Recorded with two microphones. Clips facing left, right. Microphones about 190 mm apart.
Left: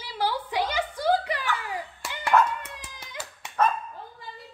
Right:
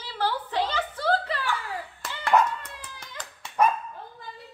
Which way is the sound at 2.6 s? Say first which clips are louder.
Even; 10° left (ahead or behind).